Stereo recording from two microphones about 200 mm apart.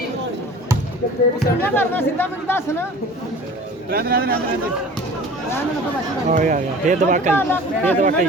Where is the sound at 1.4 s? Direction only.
10° left (ahead or behind).